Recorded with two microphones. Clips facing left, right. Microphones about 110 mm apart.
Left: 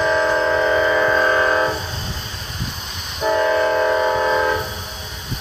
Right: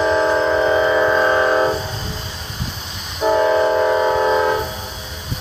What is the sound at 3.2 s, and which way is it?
Train, 15° right (ahead or behind).